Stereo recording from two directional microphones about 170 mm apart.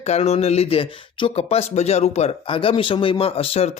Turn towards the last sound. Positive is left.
turn(degrees=35)  # may be behind; listen again after turning